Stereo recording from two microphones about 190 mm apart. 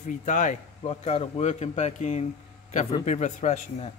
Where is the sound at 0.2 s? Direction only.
40° left (ahead or behind).